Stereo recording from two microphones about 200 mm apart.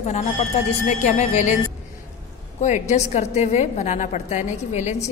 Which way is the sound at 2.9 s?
35° left (ahead or behind).